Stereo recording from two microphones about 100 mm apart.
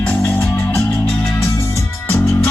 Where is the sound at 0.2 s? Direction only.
30° left (ahead or behind).